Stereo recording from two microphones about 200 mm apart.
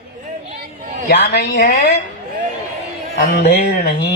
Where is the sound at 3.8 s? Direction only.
55° left (ahead or behind).